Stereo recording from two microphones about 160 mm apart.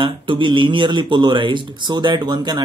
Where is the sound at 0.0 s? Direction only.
30° right (ahead or behind).